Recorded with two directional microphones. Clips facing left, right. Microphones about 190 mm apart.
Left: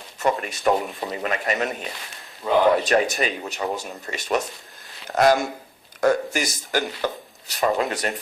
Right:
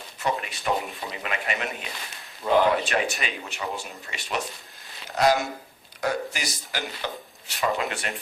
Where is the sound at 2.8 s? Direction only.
40° left (ahead or behind).